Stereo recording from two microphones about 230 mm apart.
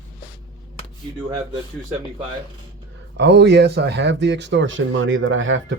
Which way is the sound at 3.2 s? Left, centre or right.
Right.